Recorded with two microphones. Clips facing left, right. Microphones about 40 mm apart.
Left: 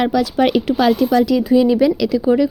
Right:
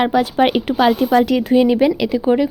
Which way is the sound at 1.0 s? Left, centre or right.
Right.